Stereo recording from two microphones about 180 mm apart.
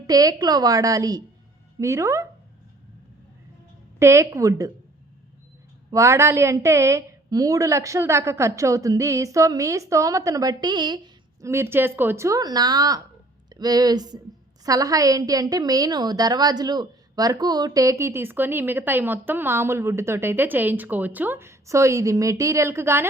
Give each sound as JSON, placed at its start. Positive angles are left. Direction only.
{"t": 0.1, "sound": "a woman's voice", "side_deg": -20}
{"t": 4.0, "sound": "a woman's voice", "side_deg": -15}
{"t": 5.9, "sound": "a woman's voice", "side_deg": -15}